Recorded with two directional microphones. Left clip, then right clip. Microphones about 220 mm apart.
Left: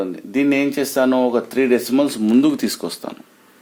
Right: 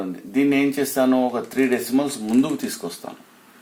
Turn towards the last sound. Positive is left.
turn(degrees=50)  # may be behind; listen again after turning